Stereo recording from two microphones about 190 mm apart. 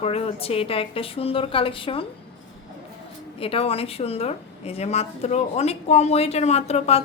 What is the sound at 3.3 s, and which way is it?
A woman's voice, 30° left (ahead or behind).